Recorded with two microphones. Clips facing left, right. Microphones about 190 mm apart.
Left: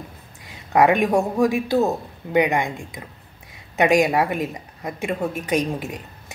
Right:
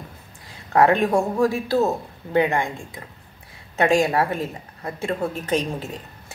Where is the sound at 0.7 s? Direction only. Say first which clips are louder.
Left 1 dB; 15° left (ahead or behind).